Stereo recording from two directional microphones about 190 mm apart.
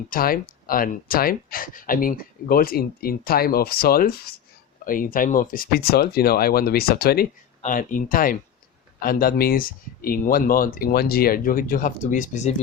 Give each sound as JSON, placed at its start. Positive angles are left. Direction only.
{"t": 0.1, "sound": "speech", "side_deg": 50}